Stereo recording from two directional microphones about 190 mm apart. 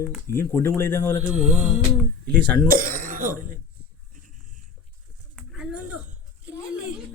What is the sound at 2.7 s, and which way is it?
Speech, 50° right (ahead or behind).